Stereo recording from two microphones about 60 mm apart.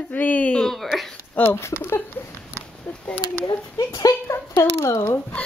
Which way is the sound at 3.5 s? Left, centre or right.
Left.